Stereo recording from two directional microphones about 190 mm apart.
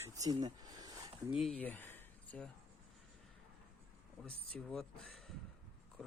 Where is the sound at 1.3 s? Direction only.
5° left (ahead or behind).